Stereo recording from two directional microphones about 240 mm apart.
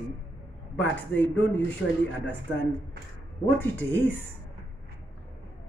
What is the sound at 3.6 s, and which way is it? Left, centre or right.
Speech, centre.